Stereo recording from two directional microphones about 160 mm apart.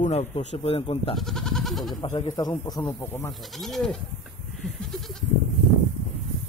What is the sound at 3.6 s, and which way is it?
Speech, centre (ahead or behind).